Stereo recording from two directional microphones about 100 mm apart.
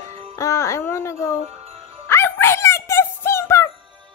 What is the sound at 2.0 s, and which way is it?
Music, 25° left (ahead or behind).